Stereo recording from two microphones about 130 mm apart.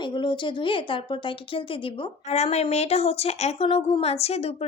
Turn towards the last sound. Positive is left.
turn(degrees=50)  # may be behind; listen again after turning